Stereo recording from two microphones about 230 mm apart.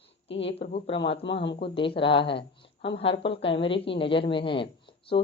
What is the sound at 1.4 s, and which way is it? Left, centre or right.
Speech, left.